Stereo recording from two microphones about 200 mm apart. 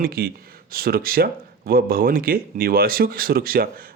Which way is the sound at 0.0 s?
50° right (ahead or behind).